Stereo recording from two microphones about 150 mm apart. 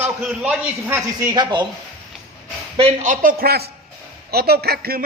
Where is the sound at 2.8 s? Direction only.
45° right (ahead or behind).